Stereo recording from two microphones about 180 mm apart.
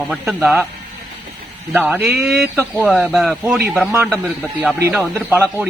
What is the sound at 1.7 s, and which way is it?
A man's voice, 10° right (ahead or behind).